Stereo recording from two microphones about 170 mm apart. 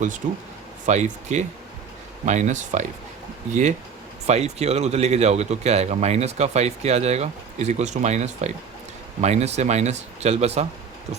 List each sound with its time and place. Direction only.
0.2 s speech: 45° right (ahead or behind)